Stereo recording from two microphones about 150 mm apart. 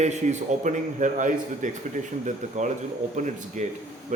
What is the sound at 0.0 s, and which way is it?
A man's voice, 50° right (ahead or behind).